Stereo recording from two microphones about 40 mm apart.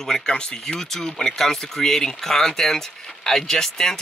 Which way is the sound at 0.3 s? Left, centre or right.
Left.